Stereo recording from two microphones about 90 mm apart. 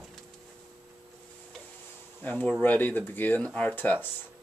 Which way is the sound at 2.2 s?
20° left (ahead or behind).